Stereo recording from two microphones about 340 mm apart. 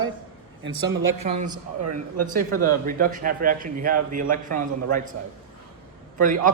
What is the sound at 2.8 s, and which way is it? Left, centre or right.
A man's voice, right.